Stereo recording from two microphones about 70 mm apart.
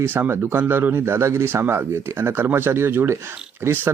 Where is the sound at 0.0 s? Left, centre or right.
Right.